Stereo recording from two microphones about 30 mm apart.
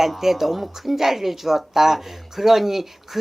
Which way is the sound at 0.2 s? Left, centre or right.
Centre.